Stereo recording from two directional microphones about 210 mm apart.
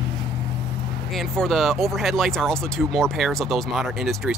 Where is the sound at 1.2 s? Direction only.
Centre (ahead or behind).